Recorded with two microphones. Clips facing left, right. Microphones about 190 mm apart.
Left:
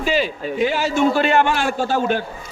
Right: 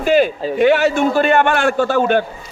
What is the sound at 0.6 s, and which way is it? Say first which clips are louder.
A man's voice: right 5 dB; 65° right (ahead or behind).